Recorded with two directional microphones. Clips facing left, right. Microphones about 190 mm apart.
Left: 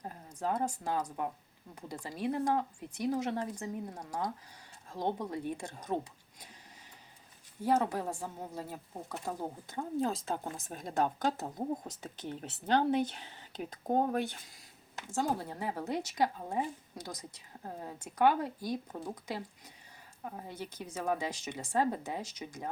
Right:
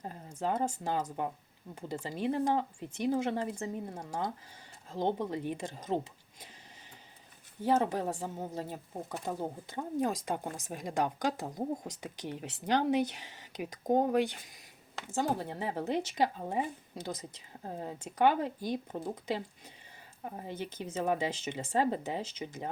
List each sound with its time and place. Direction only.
0.3 s speech: 25° right (ahead or behind)
7.6 s speech: 20° right (ahead or behind)
20.9 s speech: 25° right (ahead or behind)